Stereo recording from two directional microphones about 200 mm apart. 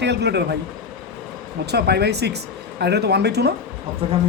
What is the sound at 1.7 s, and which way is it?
Speech, 55° right (ahead or behind).